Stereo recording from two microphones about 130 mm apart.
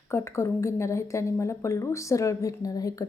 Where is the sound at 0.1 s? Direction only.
20° left (ahead or behind).